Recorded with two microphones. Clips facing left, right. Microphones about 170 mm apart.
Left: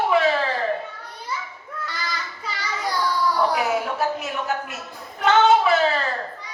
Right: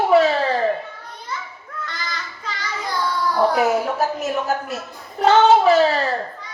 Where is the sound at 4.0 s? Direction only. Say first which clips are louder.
Right 3 dB; 40° right (ahead or behind).